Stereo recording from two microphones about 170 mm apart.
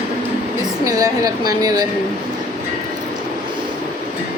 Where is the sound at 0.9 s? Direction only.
20° right (ahead or behind).